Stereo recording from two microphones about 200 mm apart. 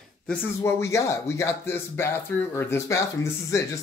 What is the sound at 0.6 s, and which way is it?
Speech, 15° left (ahead or behind).